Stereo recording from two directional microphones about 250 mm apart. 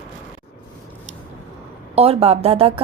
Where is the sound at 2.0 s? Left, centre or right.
Right.